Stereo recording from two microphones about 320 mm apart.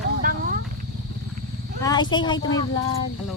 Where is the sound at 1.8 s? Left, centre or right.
Centre.